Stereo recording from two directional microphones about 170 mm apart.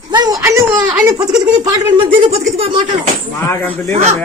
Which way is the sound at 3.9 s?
40° right (ahead or behind).